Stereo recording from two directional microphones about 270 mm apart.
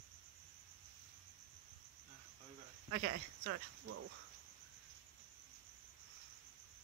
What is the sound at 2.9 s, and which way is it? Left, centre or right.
Speech, right.